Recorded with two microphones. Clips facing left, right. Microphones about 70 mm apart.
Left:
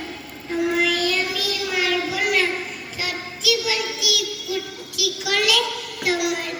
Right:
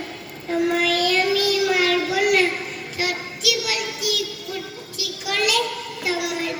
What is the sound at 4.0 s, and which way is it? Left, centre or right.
Child singing, left.